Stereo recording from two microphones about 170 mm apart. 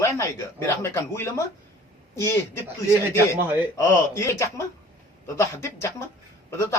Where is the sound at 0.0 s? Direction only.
15° left (ahead or behind).